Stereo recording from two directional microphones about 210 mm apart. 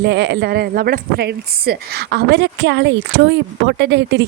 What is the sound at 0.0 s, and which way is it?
Speech, 55° right (ahead or behind).